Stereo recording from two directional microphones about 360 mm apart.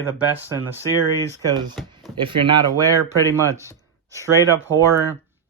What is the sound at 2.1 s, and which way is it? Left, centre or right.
Speech, centre.